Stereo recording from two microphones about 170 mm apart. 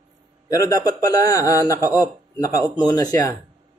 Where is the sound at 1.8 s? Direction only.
15° right (ahead or behind).